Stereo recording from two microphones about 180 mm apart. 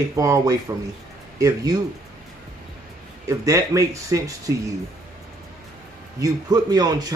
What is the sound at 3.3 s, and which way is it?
Speech, 15° right (ahead or behind).